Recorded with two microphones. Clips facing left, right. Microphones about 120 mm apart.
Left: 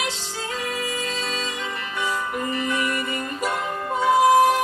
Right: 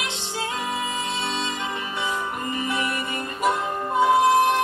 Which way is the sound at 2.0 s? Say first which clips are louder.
Left 4 dB; 20° right (ahead or behind).